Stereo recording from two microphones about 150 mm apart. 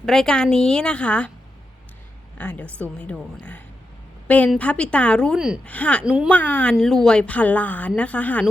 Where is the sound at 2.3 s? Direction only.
10° left (ahead or behind).